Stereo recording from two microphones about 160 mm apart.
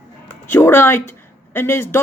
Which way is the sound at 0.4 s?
15° left (ahead or behind).